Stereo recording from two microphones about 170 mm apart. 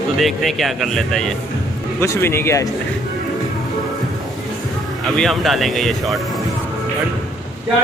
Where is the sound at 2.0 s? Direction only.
15° left (ahead or behind).